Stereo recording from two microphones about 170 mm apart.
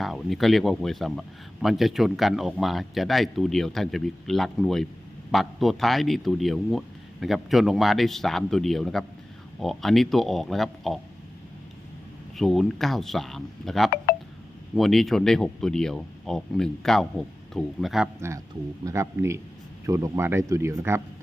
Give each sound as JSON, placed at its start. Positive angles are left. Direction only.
{"t": 0.0, "sound": "a man's voice", "side_deg": 0}
{"t": 12.4, "sound": "a man's voice", "side_deg": 0}
{"t": 18.9, "sound": "speech", "side_deg": -15}